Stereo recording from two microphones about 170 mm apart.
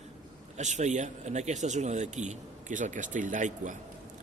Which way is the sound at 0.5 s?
45° right (ahead or behind).